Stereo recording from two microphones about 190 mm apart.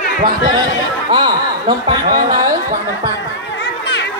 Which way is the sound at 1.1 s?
20° right (ahead or behind).